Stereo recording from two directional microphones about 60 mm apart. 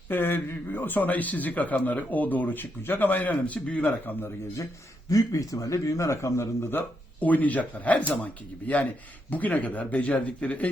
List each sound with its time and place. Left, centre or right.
0.1 s speech: left
5.0 s a man's voice: left
7.2 s speech: left